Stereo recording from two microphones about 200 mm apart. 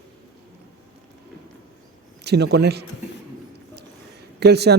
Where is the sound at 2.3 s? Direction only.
55° right (ahead or behind).